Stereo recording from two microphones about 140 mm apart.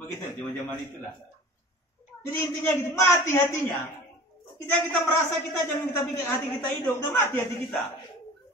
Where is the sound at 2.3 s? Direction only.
20° left (ahead or behind).